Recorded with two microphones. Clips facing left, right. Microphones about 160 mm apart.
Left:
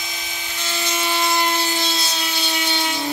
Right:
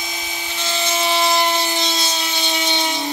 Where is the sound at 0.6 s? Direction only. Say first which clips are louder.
Right 4 dB; 25° right (ahead or behind).